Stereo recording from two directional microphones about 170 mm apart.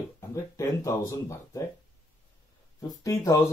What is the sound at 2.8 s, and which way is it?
Speech, 20° left (ahead or behind).